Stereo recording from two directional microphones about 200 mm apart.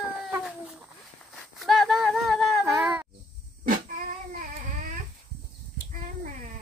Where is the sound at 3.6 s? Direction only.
40° right (ahead or behind).